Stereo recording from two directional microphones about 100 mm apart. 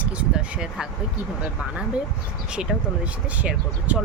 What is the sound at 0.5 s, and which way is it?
Speech, 10° right (ahead or behind).